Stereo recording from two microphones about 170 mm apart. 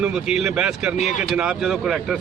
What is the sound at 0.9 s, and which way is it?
Speech, 45° left (ahead or behind).